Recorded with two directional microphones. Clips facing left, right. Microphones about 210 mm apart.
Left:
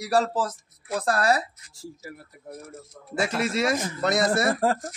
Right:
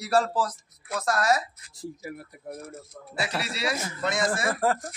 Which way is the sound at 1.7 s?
15° right (ahead or behind).